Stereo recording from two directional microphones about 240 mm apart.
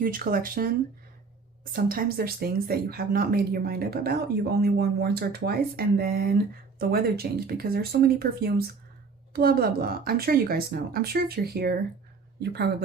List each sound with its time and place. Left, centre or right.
0.0 s speech: right
1.7 s speech: right